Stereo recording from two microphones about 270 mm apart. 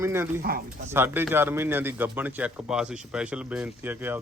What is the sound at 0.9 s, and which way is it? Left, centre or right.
Speech, centre.